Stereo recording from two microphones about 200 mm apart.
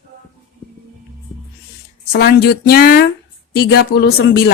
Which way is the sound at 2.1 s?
50° left (ahead or behind).